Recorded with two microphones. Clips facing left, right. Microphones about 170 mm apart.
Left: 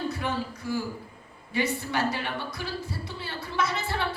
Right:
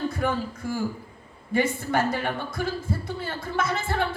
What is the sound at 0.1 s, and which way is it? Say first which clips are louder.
A man's voice: right 4 dB; 50° right (ahead or behind).